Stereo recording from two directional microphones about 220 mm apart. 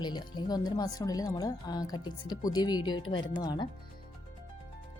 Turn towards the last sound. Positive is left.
turn(degrees=20)  # may be behind; listen again after turning